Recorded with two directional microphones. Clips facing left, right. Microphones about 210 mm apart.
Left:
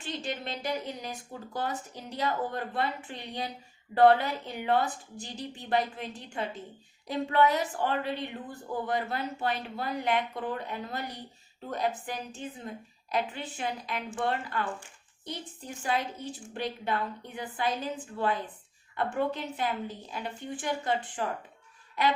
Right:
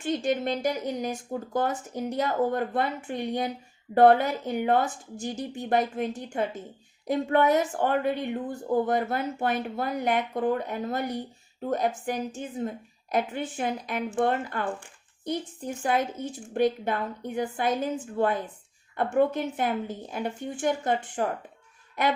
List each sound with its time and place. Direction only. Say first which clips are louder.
0.0 s speech: right 9 dB; 50° right (ahead or behind)